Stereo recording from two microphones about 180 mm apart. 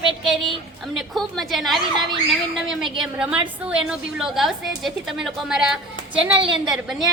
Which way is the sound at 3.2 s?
5° right (ahead or behind).